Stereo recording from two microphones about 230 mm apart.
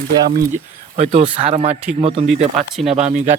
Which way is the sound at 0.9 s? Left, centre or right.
Right.